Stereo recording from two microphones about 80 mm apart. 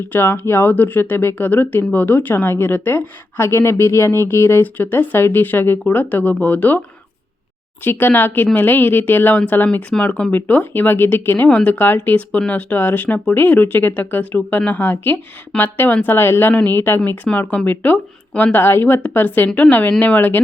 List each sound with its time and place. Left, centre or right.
0.1 s speech: left
7.9 s speech: left
17.3 s speech: centre